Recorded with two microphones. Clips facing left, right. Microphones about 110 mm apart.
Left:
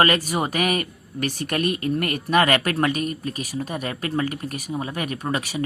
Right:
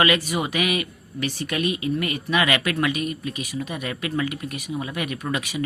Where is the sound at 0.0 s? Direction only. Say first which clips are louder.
Left 1 dB; 40° left (ahead or behind).